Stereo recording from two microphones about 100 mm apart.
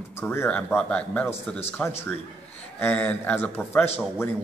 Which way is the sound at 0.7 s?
10° left (ahead or behind).